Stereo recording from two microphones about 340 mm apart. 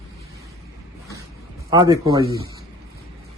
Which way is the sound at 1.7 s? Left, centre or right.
Centre.